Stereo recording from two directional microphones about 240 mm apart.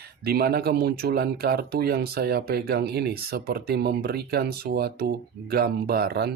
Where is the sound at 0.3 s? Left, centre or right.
Right.